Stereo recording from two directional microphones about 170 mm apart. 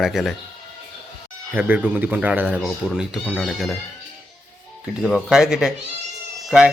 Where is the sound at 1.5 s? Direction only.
10° right (ahead or behind).